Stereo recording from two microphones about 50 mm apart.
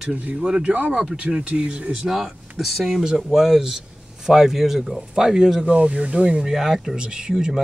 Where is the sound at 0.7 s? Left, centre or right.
Right.